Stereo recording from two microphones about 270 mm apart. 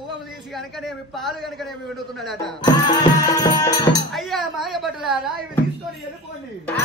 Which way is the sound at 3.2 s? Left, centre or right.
Centre.